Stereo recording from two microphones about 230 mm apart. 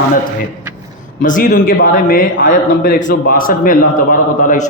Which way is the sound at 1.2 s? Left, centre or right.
Left.